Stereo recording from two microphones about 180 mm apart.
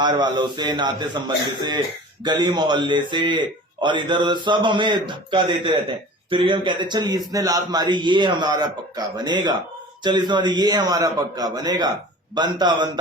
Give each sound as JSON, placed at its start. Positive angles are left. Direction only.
{"t": 0.0, "sound": "a man's voice", "side_deg": -25}
{"t": 2.2, "sound": "a man's voice", "side_deg": -25}